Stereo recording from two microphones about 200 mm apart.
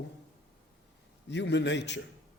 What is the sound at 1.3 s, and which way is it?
Speech, 60° left (ahead or behind).